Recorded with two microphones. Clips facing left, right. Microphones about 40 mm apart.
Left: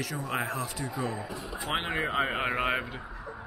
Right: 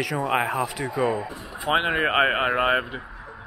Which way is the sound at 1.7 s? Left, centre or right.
Right.